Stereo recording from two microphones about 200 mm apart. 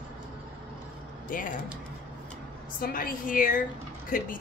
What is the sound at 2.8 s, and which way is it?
A woman's voice, 45° left (ahead or behind).